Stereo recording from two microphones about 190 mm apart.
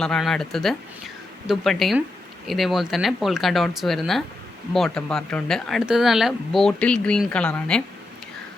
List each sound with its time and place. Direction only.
0.0 s speech: centre (ahead or behind)